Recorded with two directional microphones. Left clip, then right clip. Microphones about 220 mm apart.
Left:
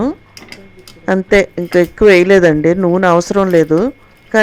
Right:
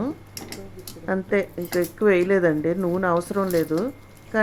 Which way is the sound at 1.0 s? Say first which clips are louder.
Left 12 dB; 40° left (ahead or behind).